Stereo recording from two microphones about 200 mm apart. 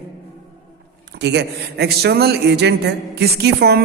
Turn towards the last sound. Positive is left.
turn(degrees=-55)  # may be behind; listen again after turning